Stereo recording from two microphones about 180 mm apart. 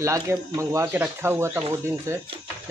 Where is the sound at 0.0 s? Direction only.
15° right (ahead or behind).